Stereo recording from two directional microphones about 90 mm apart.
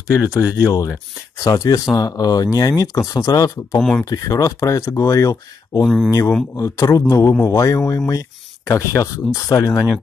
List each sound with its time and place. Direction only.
0.1 s speech: 35° left (ahead or behind)